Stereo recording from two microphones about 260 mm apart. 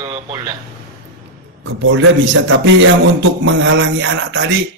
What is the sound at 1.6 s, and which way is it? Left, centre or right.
Speech, right.